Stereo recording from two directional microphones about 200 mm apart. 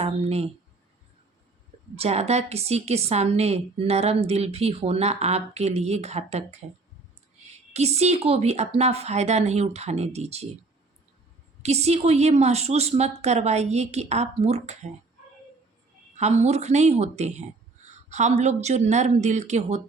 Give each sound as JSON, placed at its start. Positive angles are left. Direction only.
{"t": 0.0, "sound": "speech", "side_deg": -30}
{"t": 2.0, "sound": "a woman's voice", "side_deg": -30}
{"t": 11.6, "sound": "a woman's voice", "side_deg": -30}
{"t": 16.1, "sound": "a woman's voice", "side_deg": -35}